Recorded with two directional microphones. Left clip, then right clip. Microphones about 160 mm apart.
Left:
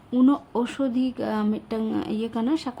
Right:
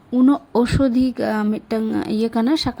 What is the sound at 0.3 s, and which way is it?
A woman's voice, 25° right (ahead or behind).